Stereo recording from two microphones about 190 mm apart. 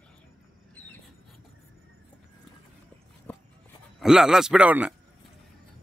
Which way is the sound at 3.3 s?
10° left (ahead or behind).